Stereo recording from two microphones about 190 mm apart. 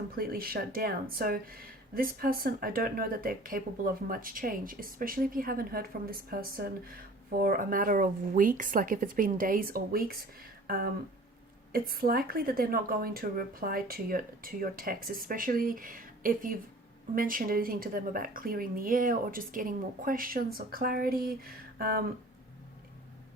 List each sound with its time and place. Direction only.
0.2 s speech: 50° right (ahead or behind)